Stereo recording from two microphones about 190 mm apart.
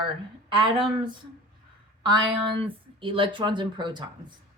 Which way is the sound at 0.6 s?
25° right (ahead or behind).